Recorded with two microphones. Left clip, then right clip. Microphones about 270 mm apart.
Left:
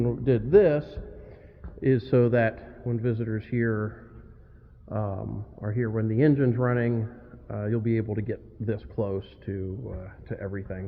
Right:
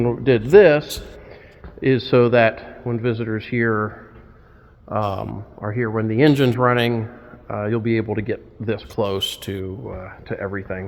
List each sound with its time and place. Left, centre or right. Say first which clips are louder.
0.0 s a man's voice: right 8 dB; right